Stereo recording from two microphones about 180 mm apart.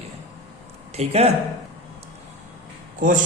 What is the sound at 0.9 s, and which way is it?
Speech, 35° right (ahead or behind).